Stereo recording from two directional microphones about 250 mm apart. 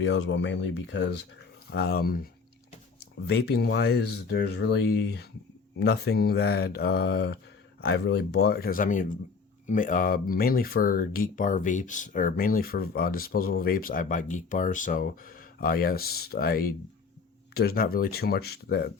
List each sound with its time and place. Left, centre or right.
0.0 s speech: left